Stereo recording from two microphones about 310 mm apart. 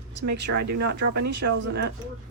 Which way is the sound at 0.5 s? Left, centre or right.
Right.